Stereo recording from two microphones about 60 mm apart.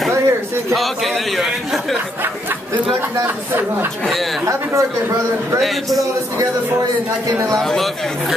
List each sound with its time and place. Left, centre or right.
0.7 s a sound: centre
4.5 s a man's voice: right
5.6 s a man's voice: centre
7.5 s speech: centre